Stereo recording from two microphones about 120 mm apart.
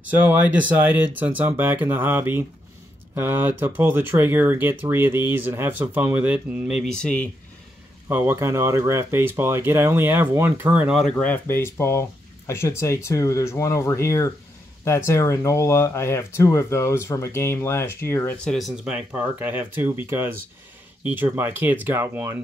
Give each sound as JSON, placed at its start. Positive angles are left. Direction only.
{"t": 0.1, "sound": "speech", "side_deg": -15}
{"t": 6.8, "sound": "speech", "side_deg": 5}
{"t": 8.1, "sound": "speech", "side_deg": -20}
{"t": 11.1, "sound": "speech", "side_deg": 15}
{"t": 18.4, "sound": "speech", "side_deg": 0}
{"t": 18.9, "sound": "speech", "side_deg": -15}